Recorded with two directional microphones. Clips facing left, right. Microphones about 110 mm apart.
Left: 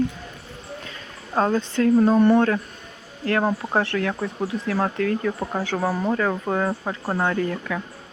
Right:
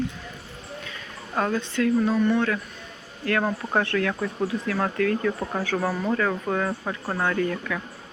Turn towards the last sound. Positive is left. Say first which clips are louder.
# left 1 dB
turn(degrees=20)  # may be behind; listen again after turning